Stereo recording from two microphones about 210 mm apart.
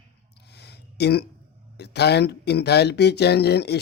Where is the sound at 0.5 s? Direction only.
50° left (ahead or behind).